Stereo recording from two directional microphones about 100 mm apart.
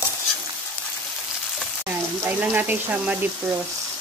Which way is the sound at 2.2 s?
15° right (ahead or behind).